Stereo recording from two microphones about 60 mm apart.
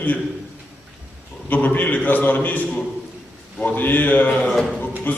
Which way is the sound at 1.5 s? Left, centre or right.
Left.